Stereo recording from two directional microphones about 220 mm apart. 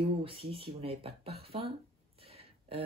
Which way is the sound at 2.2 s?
25° right (ahead or behind).